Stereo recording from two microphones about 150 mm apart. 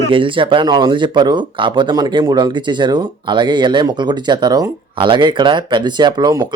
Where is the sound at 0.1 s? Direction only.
35° right (ahead or behind).